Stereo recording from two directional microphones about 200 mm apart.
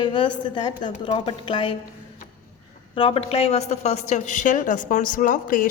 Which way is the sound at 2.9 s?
30° left (ahead or behind).